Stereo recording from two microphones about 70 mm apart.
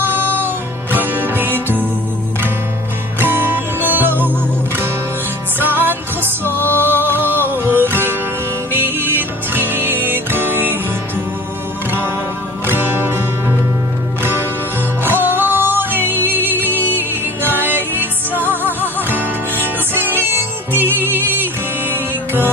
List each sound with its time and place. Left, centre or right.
0.0 s music: right
3.2 s music: right
5.5 s music: right
6.6 s music: left
7.0 s music: right
11.9 s music: right